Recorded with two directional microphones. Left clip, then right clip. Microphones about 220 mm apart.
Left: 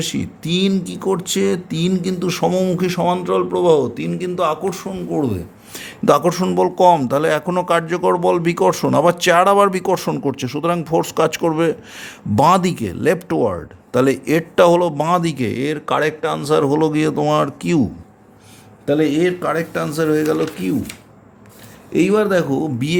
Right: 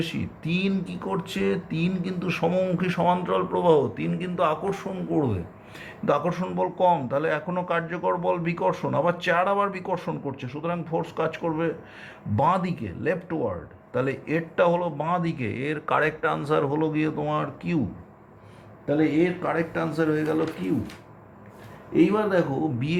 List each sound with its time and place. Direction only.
0.0 s speech: 45° left (ahead or behind); by 5.4 s 25° left (ahead or behind)
5.7 s a man's voice: 55° left (ahead or behind)
18.9 s a man's voice: 60° left (ahead or behind)
21.9 s a man's voice: 65° left (ahead or behind)